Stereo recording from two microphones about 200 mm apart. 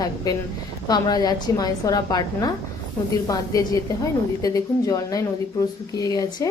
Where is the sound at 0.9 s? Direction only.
20° left (ahead or behind).